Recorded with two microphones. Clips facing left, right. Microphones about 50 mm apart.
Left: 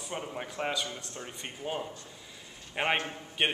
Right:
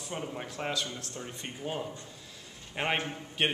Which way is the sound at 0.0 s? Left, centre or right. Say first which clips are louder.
Even; centre.